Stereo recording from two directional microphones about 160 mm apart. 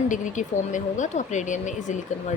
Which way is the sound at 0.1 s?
50° left (ahead or behind).